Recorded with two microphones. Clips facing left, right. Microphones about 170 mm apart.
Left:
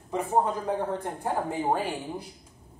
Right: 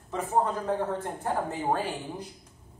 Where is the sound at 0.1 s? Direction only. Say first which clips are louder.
Left 1 dB; 15° left (ahead or behind).